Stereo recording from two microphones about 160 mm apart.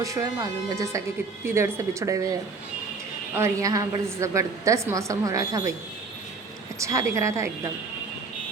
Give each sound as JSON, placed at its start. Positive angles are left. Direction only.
{"t": 0.0, "sound": "a woman's voice", "side_deg": -20}
{"t": 3.3, "sound": "a woman's voice", "side_deg": -20}
{"t": 6.7, "sound": "a woman's voice", "side_deg": -20}